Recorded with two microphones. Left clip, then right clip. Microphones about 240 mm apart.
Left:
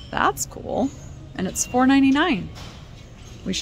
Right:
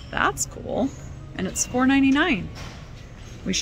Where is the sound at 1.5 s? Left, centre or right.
Centre.